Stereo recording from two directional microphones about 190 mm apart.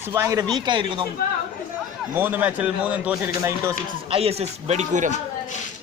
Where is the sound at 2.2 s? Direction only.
10° right (ahead or behind).